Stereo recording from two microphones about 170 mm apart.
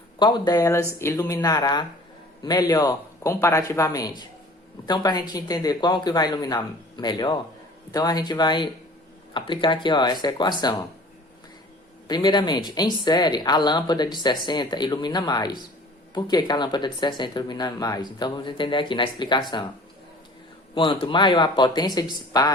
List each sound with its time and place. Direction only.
0.2 s speech: 25° left (ahead or behind)
12.0 s speech: 25° left (ahead or behind)
20.7 s speech: 30° left (ahead or behind)